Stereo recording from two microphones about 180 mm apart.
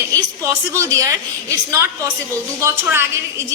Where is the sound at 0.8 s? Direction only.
15° right (ahead or behind).